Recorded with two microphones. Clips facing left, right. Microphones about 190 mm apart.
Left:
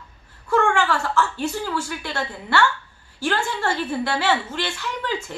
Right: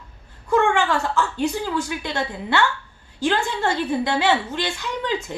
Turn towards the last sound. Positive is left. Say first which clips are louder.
# right 2 dB
turn(degrees=-15)  # may be behind; listen again after turning